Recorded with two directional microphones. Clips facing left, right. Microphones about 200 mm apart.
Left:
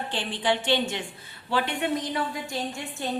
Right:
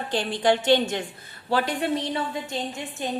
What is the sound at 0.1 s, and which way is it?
A woman's voice, 40° right (ahead or behind).